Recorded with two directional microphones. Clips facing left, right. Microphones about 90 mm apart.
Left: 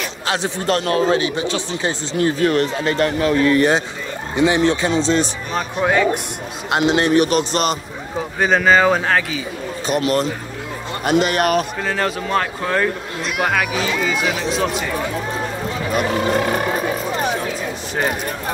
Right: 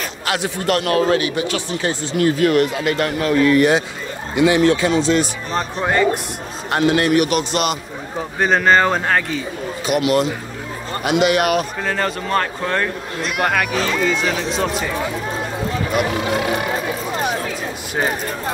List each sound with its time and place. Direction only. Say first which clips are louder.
0.3 s a man's voice: even; 30° left (ahead or behind)
5.5 s speech: left 2 dB; 5° left (ahead or behind)
6.7 s a man's voice: even; 20° left (ahead or behind); by 7.7 s 35° left (ahead or behind)
8.4 s speech: even; centre (ahead or behind)
9.8 s a man's voice: right 1 dB; 35° left (ahead or behind)
11.8 s speech: even; centre (ahead or behind)
16.0 s a man's voice: left 3 dB; 40° left (ahead or behind)